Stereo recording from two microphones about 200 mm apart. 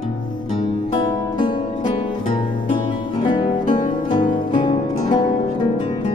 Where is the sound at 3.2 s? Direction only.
25° left (ahead or behind).